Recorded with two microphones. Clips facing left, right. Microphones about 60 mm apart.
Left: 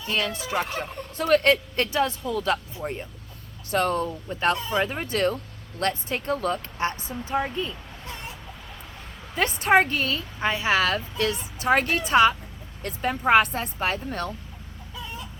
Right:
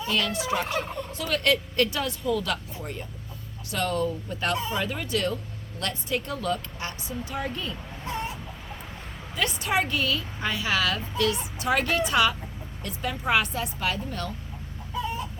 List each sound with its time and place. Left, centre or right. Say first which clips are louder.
0.1 s a woman's voice: even; left
9.3 s a woman's voice: left 6 dB; left